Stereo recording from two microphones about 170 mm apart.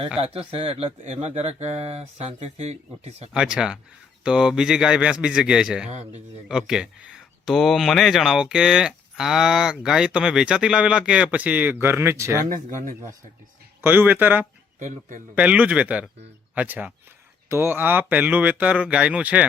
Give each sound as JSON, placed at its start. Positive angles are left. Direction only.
{"t": 0.2, "sound": "speech", "side_deg": -35}
{"t": 3.3, "sound": "speech", "side_deg": -5}
{"t": 5.9, "sound": "speech", "side_deg": -40}
{"t": 6.5, "sound": "speech", "side_deg": -5}
{"t": 12.7, "sound": "a man's voice", "side_deg": -50}
{"t": 13.8, "sound": "speech", "side_deg": -10}
{"t": 14.8, "sound": "a man's voice", "side_deg": -45}
{"t": 15.4, "sound": "speech", "side_deg": -5}